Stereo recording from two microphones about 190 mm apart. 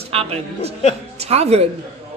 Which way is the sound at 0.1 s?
30° right (ahead or behind).